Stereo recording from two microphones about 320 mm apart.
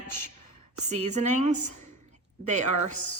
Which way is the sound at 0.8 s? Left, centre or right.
Right.